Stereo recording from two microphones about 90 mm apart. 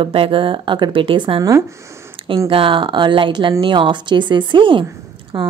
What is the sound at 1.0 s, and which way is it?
A woman's voice, 75° right (ahead or behind).